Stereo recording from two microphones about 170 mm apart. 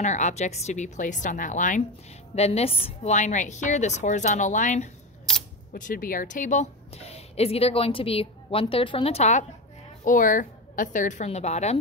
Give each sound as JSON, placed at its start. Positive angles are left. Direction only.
{"t": 0.0, "sound": "a woman's voice", "side_deg": 45}